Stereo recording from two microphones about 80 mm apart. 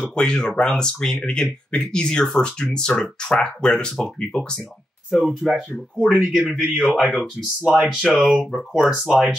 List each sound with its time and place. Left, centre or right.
0.0 s speech: centre
5.1 s speech: centre
6.1 s a man's voice: centre
6.5 s speech: centre
7.6 s speech: centre
8.0 s speech: centre